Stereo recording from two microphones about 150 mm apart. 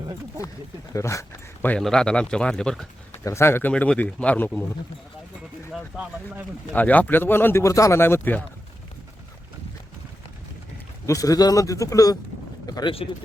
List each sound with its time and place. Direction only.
0.9 s speech: 20° left (ahead or behind)
1.6 s speech: 5° left (ahead or behind)
3.1 s speech: 15° left (ahead or behind)
5.7 s speech: 10° right (ahead or behind)
6.7 s speech: 10° left (ahead or behind)
11.0 s speech: 20° left (ahead or behind)